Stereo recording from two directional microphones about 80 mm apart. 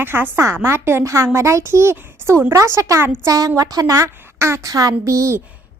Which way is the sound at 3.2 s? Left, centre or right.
Right.